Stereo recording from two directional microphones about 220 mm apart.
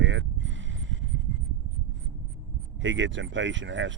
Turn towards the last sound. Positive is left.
turn(degrees=-55)  # may be behind; listen again after turning